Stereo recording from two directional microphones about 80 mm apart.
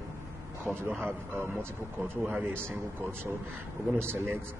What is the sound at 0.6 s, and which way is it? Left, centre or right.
A man's voice, right.